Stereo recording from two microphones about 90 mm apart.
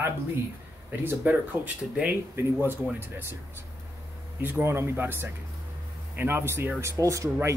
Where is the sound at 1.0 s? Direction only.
20° right (ahead or behind).